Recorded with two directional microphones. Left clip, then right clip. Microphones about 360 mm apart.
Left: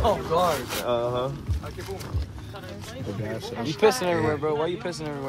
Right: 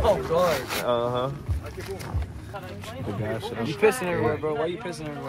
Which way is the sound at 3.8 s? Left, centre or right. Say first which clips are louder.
Left 1 dB; left.